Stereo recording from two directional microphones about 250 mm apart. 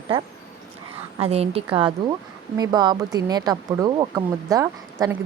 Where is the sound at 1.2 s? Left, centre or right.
Right.